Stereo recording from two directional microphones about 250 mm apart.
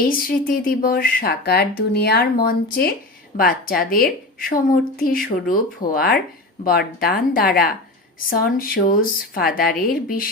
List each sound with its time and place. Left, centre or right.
0.1 s a woman's voice: left